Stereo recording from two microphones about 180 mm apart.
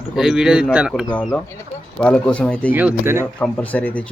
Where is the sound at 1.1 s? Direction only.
5° left (ahead or behind).